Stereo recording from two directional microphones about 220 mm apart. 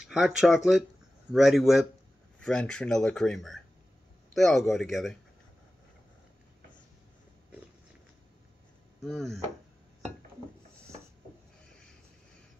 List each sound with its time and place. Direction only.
0.1 s speech: 5° right (ahead or behind)
9.0 s speech: centre (ahead or behind)